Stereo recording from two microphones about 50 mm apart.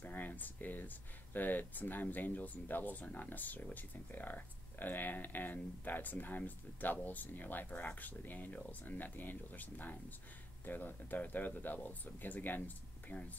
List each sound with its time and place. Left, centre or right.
0.0 s speech: left